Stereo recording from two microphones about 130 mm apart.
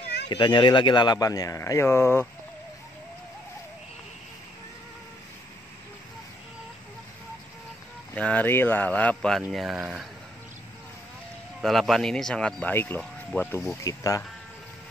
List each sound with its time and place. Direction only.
0.3 s speech: 40° left (ahead or behind); by 2.2 s 20° left (ahead or behind)
8.1 s speech: 10° left (ahead or behind); by 10.0 s 5° right (ahead or behind)
11.6 s speech: centre (ahead or behind)
13.8 s speech: 25° left (ahead or behind)